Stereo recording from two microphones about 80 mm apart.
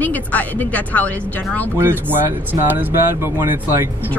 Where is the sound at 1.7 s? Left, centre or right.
Right.